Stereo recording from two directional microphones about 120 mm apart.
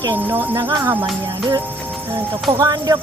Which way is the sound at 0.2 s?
15° right (ahead or behind).